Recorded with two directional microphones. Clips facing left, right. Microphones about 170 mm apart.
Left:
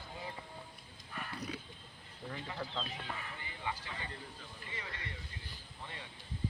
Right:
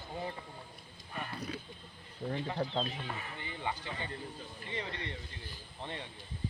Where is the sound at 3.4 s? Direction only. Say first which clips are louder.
Right 3 dB; 25° right (ahead or behind).